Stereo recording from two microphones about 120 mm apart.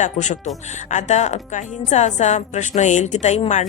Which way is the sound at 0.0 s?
80° left.